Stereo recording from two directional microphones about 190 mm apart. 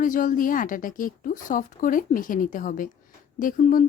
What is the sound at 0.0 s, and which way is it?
Speech, 45° left (ahead or behind).